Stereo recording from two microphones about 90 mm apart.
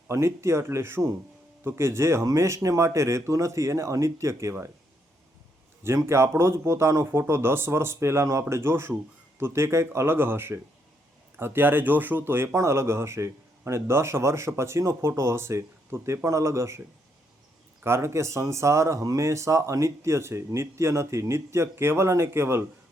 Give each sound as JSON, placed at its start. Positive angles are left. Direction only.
{"t": 0.1, "sound": "speech", "side_deg": -30}
{"t": 5.8, "sound": "speech", "side_deg": -30}
{"t": 17.8, "sound": "speech", "side_deg": -30}